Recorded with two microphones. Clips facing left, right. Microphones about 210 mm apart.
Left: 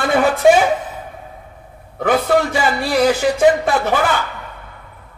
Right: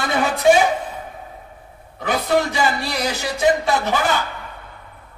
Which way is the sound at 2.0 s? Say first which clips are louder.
Left 4 dB; 55° left (ahead or behind).